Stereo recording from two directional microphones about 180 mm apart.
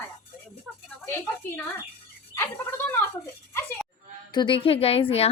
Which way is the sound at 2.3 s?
15° left (ahead or behind).